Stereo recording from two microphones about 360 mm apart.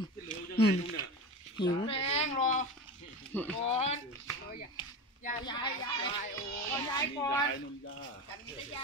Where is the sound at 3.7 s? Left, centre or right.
Centre.